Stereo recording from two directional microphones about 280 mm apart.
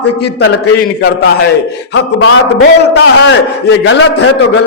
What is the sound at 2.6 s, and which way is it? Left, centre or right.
A man's voice, left.